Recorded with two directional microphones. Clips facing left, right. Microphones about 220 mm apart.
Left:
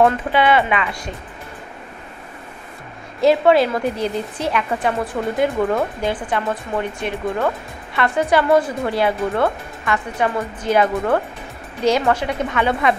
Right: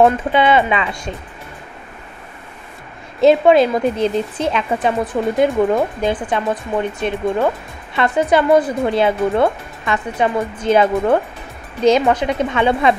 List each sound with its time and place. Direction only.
0.0 s speech: 25° right (ahead or behind)
3.2 s speech: 20° right (ahead or behind)